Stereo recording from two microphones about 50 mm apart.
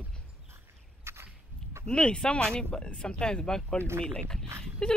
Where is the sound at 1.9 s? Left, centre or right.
Centre.